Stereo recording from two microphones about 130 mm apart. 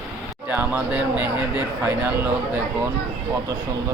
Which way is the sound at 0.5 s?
15° right (ahead or behind).